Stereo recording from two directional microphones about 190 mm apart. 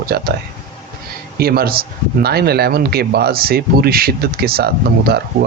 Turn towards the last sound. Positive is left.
turn(degrees=-55)  # may be behind; listen again after turning